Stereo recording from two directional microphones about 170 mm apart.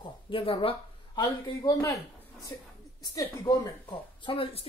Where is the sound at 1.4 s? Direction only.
20° left (ahead or behind).